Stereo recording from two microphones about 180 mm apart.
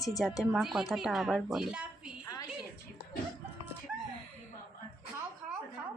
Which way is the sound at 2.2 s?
20° left (ahead or behind).